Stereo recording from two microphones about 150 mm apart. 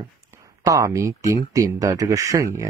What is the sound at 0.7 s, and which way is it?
Speech, 20° right (ahead or behind).